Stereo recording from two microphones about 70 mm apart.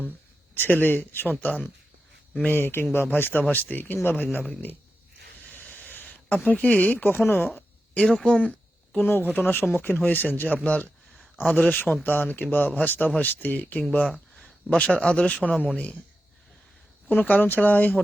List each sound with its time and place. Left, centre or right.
0.5 s speech: left
5.6 s a sound: left
6.5 s speech: centre
7.9 s speech: centre; by 10.6 s left
10.6 s speech: centre
15.4 s a man's voice: centre
17.1 s speech: left